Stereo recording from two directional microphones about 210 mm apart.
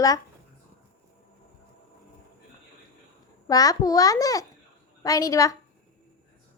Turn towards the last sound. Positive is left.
turn(degrees=15)  # may be behind; listen again after turning